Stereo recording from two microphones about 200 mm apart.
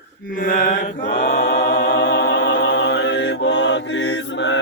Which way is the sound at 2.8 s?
65° left (ahead or behind).